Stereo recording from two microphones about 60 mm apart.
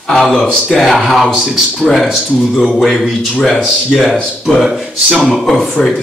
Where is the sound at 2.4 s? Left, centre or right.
Centre.